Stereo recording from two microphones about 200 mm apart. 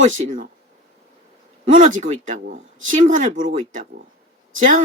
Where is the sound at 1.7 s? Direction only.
40° right (ahead or behind).